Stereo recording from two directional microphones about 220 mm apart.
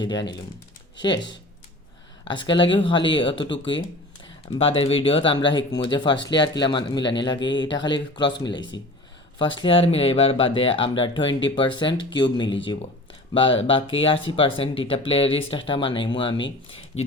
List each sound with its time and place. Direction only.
0.0 s speech: 20° left (ahead or behind)
1.1 s speech: 55° left (ahead or behind)
2.2 s speech: 20° left (ahead or behind)